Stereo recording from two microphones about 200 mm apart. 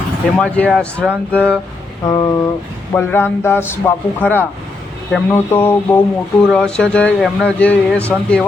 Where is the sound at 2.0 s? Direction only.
20° left (ahead or behind).